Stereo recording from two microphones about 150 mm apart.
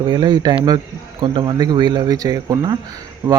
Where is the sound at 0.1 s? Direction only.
25° right (ahead or behind).